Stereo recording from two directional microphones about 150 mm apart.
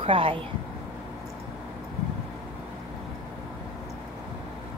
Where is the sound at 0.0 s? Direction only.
35° right (ahead or behind).